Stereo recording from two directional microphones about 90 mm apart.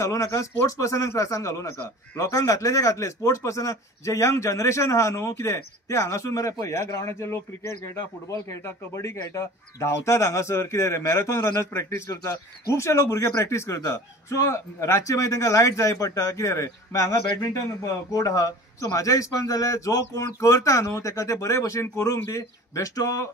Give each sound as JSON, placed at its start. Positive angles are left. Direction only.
{"t": 0.0, "sound": "a man's voice", "side_deg": 35}